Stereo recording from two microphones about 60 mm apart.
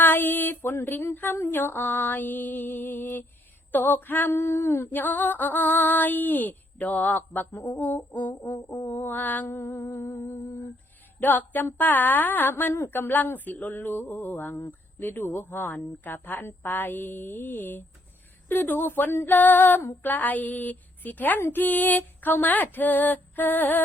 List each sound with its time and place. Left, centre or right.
0.0 s female singing: left
1.5 s speech: left
4.3 s a sound: left
4.9 s a woman's voice: left
9.5 s speech: left
11.2 s a woman's voice: left